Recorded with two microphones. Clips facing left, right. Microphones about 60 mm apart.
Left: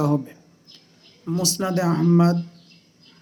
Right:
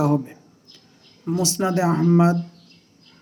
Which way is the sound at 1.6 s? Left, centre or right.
Right.